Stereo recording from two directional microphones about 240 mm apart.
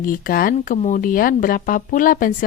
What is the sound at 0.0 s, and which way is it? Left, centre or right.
Speech, left.